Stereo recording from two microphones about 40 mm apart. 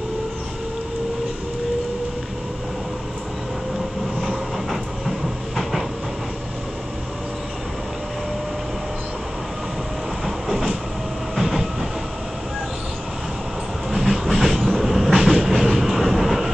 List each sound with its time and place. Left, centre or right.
4.2 s train: centre
10.2 s train: centre
13.8 s train: centre